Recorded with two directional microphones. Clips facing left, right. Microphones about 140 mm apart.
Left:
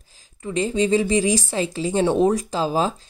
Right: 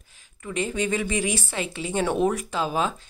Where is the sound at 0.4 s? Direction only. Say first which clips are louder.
Left 6 dB; 30° left (ahead or behind).